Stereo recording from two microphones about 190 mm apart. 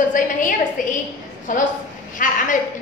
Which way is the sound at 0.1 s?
45° left (ahead or behind).